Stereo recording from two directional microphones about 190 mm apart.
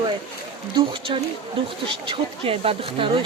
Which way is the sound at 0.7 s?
30° right (ahead or behind).